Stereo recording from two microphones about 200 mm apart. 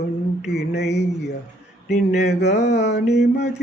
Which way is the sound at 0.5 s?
55° left (ahead or behind).